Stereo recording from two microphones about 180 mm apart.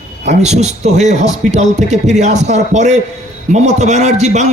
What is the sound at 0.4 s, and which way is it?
Speech, 40° right (ahead or behind).